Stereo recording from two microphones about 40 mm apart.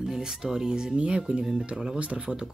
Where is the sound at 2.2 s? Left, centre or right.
Centre.